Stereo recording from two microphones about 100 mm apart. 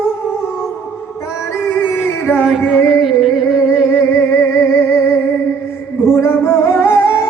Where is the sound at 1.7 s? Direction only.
20° left (ahead or behind).